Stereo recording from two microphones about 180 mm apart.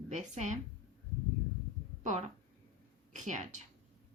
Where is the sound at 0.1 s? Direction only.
40° right (ahead or behind).